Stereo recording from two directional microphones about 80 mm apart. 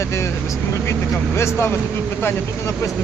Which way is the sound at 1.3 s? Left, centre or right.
Left.